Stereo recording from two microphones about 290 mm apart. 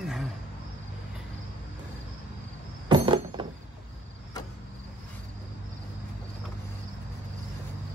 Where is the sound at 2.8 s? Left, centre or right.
Centre.